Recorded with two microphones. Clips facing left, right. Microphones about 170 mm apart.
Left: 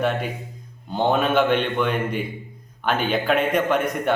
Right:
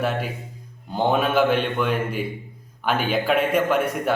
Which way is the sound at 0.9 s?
10° right (ahead or behind).